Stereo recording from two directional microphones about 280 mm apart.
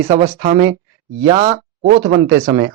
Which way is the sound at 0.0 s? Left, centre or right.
Right.